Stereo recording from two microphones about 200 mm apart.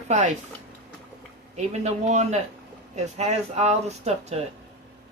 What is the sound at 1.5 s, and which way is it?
Speech, 35° right (ahead or behind).